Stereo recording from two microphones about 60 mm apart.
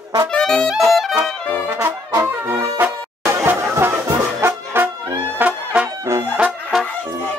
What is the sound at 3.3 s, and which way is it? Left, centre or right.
Music, right.